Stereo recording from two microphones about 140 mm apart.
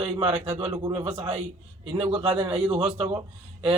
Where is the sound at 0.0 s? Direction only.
45° right (ahead or behind).